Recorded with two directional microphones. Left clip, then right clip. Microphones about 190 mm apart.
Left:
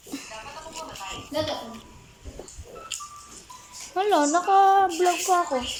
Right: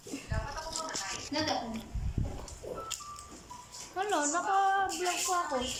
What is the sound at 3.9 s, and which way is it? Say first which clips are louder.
Speech: left 10 dB; 25° left (ahead or behind).